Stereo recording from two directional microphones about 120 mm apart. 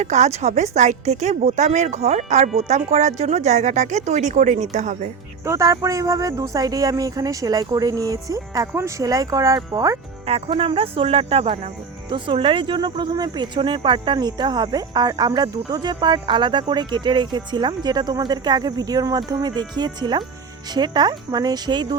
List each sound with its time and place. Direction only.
0.0 s a woman's voice: 75° right (ahead or behind)
5.5 s speech: 25° right (ahead or behind)
10.2 s speech: 55° right (ahead or behind)
12.1 s speech: 45° right (ahead or behind)